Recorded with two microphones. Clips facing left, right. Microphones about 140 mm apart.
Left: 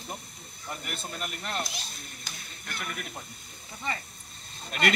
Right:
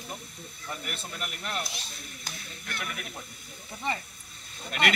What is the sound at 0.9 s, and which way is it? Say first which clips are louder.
Speech: left 1 dB; 40° left (ahead or behind).